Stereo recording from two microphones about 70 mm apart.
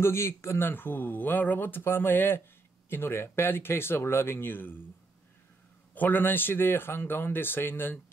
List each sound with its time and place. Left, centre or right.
0.0 s speech: left
5.9 s speech: left